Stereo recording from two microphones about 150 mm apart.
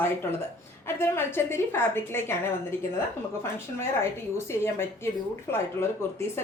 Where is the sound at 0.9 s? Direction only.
15° left (ahead or behind).